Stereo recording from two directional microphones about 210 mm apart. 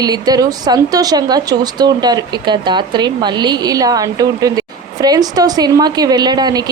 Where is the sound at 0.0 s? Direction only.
20° right (ahead or behind).